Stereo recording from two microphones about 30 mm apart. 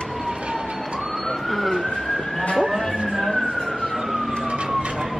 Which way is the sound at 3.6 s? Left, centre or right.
Left.